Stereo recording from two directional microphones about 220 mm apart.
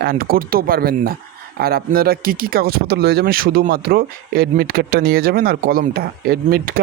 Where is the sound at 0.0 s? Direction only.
45° right (ahead or behind).